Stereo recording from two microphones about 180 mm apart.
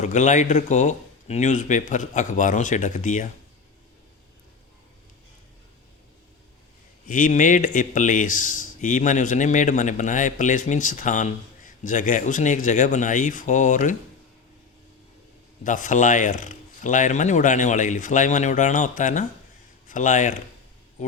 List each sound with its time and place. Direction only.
0.0 s speech: 40° left (ahead or behind)
7.1 s speech: 45° left (ahead or behind)
15.6 s speech: 45° left (ahead or behind)